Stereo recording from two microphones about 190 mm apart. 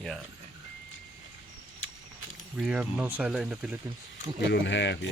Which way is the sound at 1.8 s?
90° left.